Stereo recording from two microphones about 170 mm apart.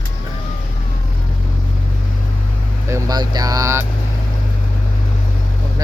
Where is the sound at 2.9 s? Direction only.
20° right (ahead or behind).